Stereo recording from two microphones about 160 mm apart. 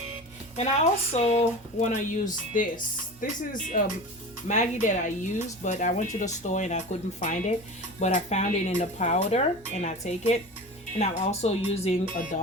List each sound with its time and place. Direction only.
0.5 s speech: 45° left (ahead or behind)